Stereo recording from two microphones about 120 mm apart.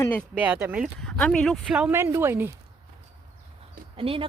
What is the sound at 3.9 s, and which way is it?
Speech, 50° right (ahead or behind).